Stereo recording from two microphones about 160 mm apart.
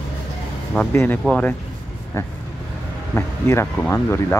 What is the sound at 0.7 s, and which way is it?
Speech, 10° left (ahead or behind).